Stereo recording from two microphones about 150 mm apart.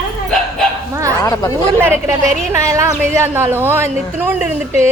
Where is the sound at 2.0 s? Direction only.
20° right (ahead or behind).